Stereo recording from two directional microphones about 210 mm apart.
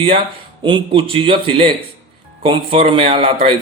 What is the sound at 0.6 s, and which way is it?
Speech, 25° right (ahead or behind).